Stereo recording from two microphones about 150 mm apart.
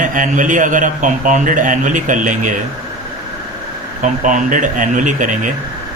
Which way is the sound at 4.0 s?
60° right (ahead or behind).